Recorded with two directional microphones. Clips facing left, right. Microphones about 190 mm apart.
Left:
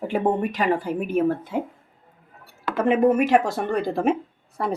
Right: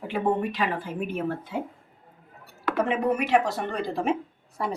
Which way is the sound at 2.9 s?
45° left (ahead or behind).